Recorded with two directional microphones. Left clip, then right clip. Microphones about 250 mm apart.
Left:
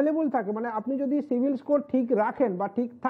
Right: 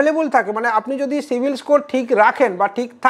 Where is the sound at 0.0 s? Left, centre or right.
Centre.